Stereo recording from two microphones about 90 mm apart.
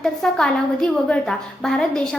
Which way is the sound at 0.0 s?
5° left (ahead or behind).